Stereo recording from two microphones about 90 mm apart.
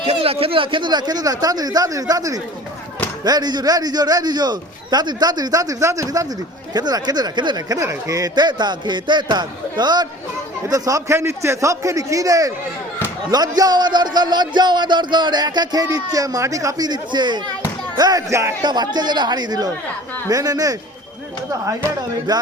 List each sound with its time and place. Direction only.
0.0 s speech: 90° right; by 6.2 s 35° right (ahead or behind)
6.7 s speech: 50° right (ahead or behind)
10.7 s a man's voice: 40° right (ahead or behind)
17.9 s a man's voice: 45° right (ahead or behind)
18.6 s speech: 55° right (ahead or behind)
22.3 s speech: 50° right (ahead or behind)